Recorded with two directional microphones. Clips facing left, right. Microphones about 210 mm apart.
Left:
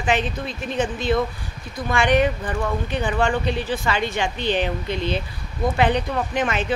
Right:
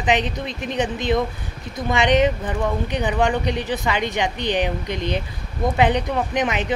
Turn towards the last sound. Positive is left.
turn(degrees=-15)  # may be behind; listen again after turning